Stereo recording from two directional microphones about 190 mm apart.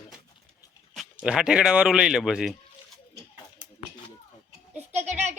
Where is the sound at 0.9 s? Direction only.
Centre (ahead or behind).